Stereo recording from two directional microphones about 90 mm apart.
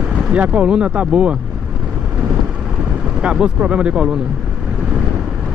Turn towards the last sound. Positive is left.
turn(degrees=-10)  # may be behind; listen again after turning